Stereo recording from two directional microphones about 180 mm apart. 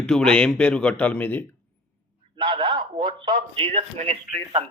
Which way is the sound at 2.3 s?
25° right (ahead or behind).